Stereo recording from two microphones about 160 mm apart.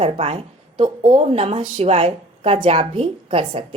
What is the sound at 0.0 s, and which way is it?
Speech, 40° right (ahead or behind).